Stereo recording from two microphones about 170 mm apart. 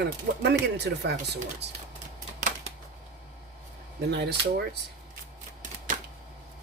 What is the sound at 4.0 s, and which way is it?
Speech, 75° right (ahead or behind).